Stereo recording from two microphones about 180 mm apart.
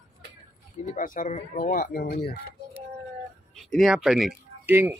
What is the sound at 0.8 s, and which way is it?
Speech, 45° left (ahead or behind).